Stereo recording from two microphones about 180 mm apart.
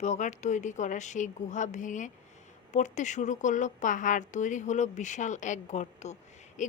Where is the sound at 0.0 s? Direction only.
40° left (ahead or behind).